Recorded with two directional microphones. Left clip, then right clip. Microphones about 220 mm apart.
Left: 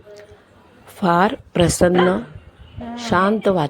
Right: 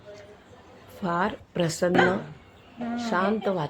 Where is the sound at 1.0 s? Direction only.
35° left (ahead or behind).